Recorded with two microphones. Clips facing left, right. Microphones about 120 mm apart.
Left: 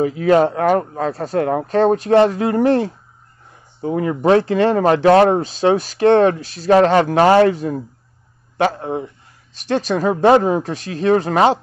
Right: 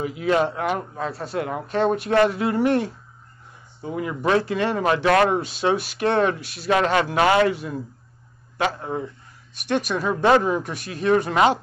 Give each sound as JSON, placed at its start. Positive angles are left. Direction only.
{"t": 0.2, "sound": "speech", "side_deg": 45}
{"t": 3.8, "sound": "speech", "side_deg": 45}
{"t": 8.8, "sound": "speech", "side_deg": 25}
{"t": 9.7, "sound": "speech", "side_deg": 35}